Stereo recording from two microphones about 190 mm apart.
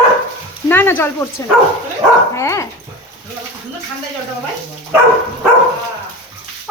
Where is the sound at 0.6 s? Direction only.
10° left (ahead or behind).